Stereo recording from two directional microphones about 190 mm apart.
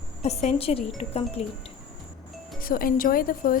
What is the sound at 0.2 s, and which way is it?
A woman's voice, 35° left (ahead or behind).